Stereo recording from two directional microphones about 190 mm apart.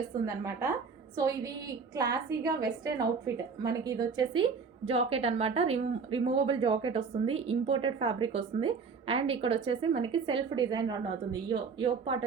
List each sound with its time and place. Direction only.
0.1 s a woman's voice: 20° right (ahead or behind)